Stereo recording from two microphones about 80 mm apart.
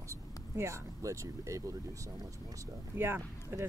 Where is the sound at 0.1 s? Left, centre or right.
Right.